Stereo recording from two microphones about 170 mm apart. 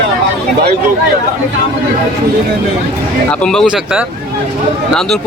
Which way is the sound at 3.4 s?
5° left (ahead or behind).